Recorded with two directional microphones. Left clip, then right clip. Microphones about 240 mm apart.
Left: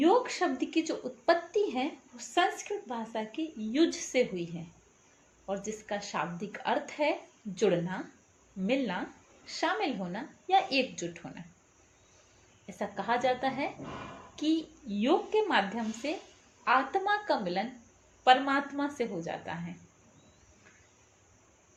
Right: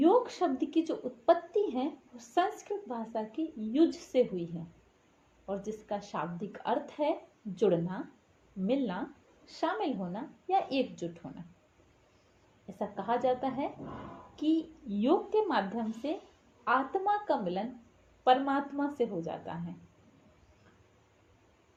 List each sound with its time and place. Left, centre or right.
0.0 s a woman's voice: centre
5.5 s a woman's voice: centre
12.8 s a woman's voice: centre